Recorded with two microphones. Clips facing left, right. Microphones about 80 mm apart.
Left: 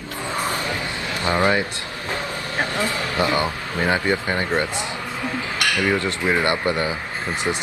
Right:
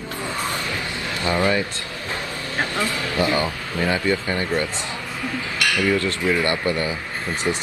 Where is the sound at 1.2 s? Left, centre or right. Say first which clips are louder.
Left 1 dB; left.